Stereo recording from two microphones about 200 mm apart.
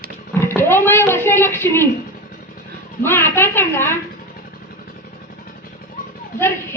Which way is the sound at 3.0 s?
10° left (ahead or behind).